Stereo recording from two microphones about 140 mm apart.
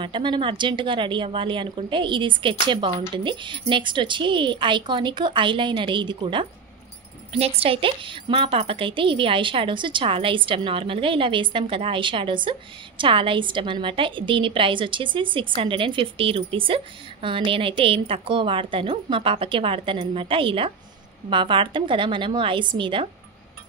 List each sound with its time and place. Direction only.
0.0 s a woman's voice: 35° right (ahead or behind)